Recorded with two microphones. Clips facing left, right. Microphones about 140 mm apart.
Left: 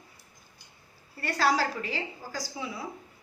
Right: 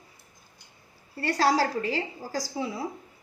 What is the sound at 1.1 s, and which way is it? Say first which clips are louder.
A woman's voice: right 3 dB; 30° right (ahead or behind).